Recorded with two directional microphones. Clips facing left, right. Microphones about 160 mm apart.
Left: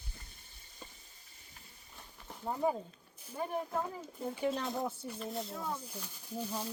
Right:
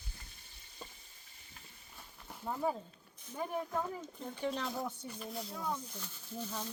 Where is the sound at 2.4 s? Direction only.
20° left (ahead or behind).